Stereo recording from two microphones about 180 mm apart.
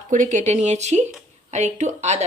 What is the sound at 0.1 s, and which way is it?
A woman's voice, 45° right (ahead or behind).